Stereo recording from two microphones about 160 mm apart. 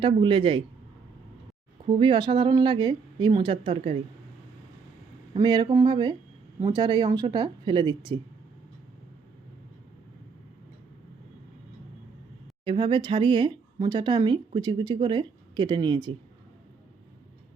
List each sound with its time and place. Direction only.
0.0 s speech: 30° right (ahead or behind)
1.9 s a woman's voice: 30° right (ahead or behind)
5.3 s a woman's voice: 25° right (ahead or behind)
12.6 s speech: 30° right (ahead or behind)